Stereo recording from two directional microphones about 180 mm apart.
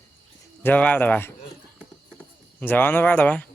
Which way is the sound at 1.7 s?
10° left (ahead or behind).